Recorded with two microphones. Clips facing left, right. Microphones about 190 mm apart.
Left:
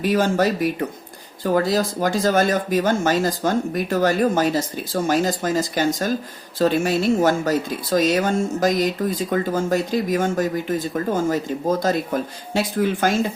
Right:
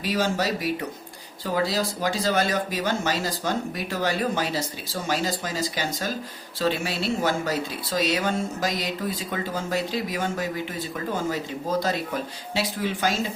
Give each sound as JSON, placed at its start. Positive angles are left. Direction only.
{"t": 0.0, "sound": "speech", "side_deg": 50}